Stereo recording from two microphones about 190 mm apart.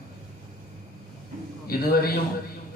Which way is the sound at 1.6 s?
50° left (ahead or behind).